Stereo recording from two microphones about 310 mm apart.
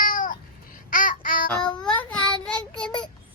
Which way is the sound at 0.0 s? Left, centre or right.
Left.